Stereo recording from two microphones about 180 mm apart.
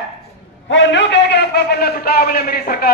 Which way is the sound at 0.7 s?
85° left.